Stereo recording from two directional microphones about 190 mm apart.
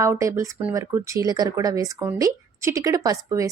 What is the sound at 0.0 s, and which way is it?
Speech, 15° right (ahead or behind).